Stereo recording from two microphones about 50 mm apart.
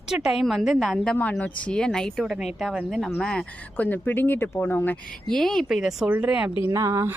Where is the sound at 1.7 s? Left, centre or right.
Centre.